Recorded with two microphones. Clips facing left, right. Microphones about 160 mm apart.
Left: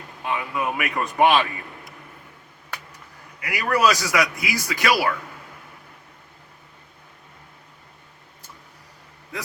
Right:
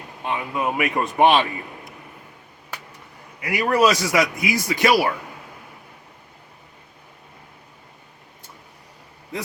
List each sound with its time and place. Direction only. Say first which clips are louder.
0.3 s a man's voice: right 1 dB; 25° right (ahead or behind)
3.4 s a man's voice: right 2 dB; 25° right (ahead or behind)